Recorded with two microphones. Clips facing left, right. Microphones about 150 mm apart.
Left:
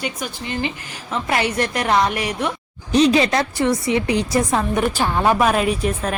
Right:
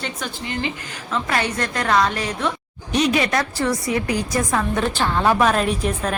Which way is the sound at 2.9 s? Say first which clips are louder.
Left 4 dB; 30° left (ahead or behind).